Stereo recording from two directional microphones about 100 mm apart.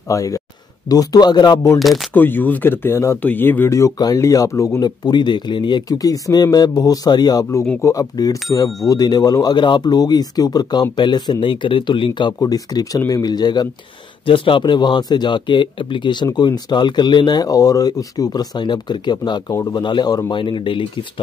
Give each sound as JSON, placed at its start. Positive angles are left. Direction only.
{"t": 0.1, "sound": "speech", "side_deg": 35}
{"t": 2.1, "sound": "speech", "side_deg": 20}
{"t": 5.9, "sound": "speech", "side_deg": 35}
{"t": 14.2, "sound": "speech", "side_deg": 60}
{"t": 19.8, "sound": "speech", "side_deg": 50}